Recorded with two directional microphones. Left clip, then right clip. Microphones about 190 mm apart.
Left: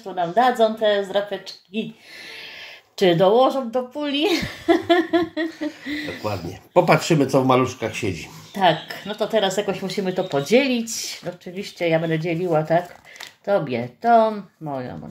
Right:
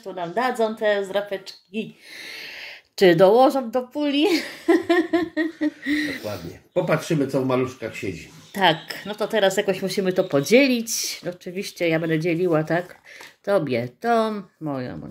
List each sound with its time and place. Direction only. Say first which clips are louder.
0.0 s speech: left 6 dB; 20° right (ahead or behind); by 6.2 s 35° right (ahead or behind)
6.2 s speech: left 4 dB; 40° left (ahead or behind)
8.5 s speech: left 1 dB; 30° right (ahead or behind)